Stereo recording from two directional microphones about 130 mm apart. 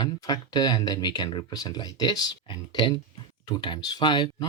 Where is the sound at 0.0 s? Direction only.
30° left (ahead or behind).